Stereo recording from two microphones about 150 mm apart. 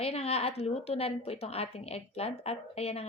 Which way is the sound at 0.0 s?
40° left (ahead or behind).